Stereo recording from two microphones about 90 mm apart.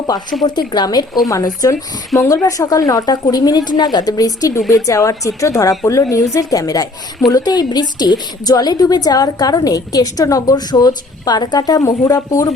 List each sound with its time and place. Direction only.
0.4 s a woman's voice: 50° left (ahead or behind)